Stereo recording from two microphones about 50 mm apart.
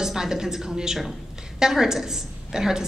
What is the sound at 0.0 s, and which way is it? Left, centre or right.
A woman's voice, centre.